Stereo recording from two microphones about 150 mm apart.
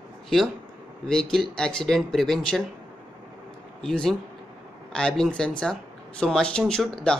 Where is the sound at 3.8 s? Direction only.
5° left (ahead or behind).